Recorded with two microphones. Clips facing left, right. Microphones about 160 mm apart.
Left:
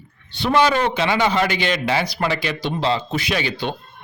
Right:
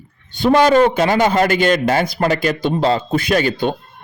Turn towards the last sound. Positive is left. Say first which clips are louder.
# right 7 dB
turn(degrees=-45)  # may be behind; listen again after turning